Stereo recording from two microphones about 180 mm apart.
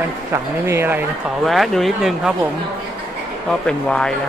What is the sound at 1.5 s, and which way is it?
Speech, centre (ahead or behind).